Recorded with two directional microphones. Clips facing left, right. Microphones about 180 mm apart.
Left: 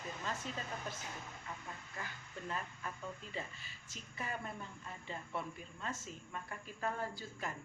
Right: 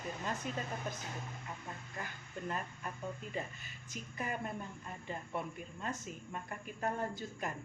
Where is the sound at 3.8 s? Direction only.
20° right (ahead or behind).